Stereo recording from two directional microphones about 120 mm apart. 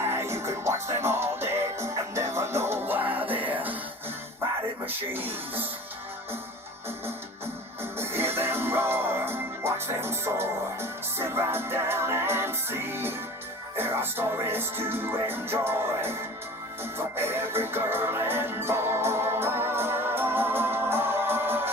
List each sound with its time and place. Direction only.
0.0 s music: 20° right (ahead or behind)
4.9 s speech: 15° right (ahead or behind)
7.9 s music: 20° right (ahead or behind)